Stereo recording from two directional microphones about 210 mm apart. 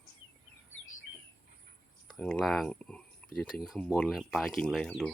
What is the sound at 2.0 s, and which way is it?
Speech, 5° left (ahead or behind).